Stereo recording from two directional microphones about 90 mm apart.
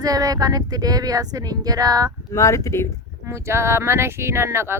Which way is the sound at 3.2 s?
30° right (ahead or behind).